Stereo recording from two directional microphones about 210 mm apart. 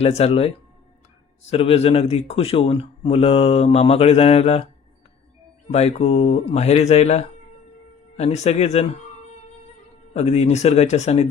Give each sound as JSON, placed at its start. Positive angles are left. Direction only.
{"t": 0.0, "sound": "speech", "side_deg": 30}
{"t": 5.7, "sound": "speech", "side_deg": 30}
{"t": 10.2, "sound": "speech", "side_deg": 30}